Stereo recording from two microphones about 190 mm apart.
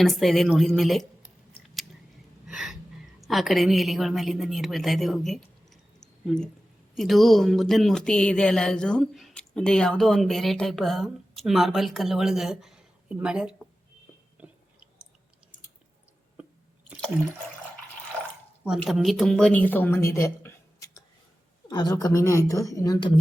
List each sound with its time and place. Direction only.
0.0 s speech: centre (ahead or behind)
2.5 s a sound: 5° right (ahead or behind)
3.2 s speech: centre (ahead or behind)
6.0 s a sound: 5° left (ahead or behind)
6.9 s speech: centre (ahead or behind)
14.4 s chewing: 10° right (ahead or behind)
18.6 s a woman's voice: 5° right (ahead or behind); by 23.1 s 20° left (ahead or behind)